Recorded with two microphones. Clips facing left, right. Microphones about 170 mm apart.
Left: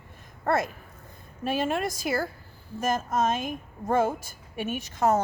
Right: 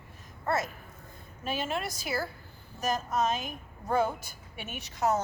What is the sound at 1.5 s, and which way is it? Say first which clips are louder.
Speech: left 6 dB; 50° left (ahead or behind).